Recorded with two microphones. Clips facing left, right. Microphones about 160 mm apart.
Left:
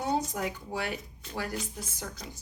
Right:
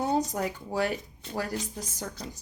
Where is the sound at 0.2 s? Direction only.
40° right (ahead or behind).